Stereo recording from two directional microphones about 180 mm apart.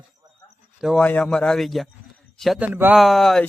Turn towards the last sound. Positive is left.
turn(degrees=0)  # may be behind; listen again after turning